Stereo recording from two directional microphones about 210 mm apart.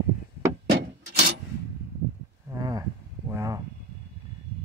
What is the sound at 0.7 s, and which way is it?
Wood, 55° right (ahead or behind).